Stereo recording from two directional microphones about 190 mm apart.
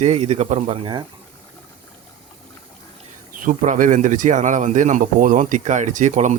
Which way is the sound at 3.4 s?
45° right (ahead or behind).